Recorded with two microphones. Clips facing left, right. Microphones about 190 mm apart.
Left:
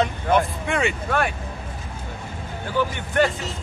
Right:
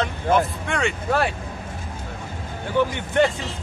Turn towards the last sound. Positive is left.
turn(degrees=-20)  # may be behind; listen again after turning